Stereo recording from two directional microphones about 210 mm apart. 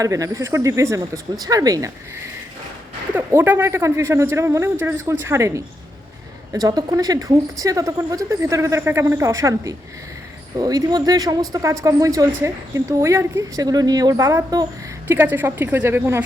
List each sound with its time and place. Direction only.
0.0 s speech: 15° right (ahead or behind)
3.2 s speech: 10° right (ahead or behind)